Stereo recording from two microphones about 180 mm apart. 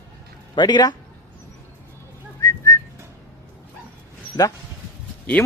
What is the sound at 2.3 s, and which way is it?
Whistling, 15° left (ahead or behind).